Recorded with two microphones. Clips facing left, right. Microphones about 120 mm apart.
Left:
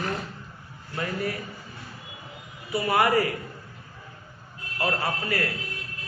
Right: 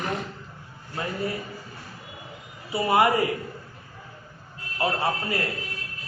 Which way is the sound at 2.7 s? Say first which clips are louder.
Right 1 dB; 25° right (ahead or behind).